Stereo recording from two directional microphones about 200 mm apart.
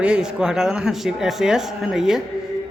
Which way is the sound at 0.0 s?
5° right (ahead or behind).